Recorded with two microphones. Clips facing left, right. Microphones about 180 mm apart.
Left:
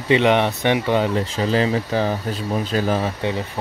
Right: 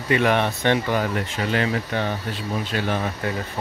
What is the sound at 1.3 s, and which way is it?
Speech, 30° left (ahead or behind).